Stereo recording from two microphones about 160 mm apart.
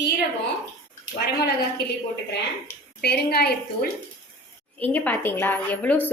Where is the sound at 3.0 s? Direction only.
80° left.